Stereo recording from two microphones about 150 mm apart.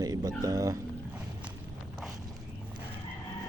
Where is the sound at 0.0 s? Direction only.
25° right (ahead or behind).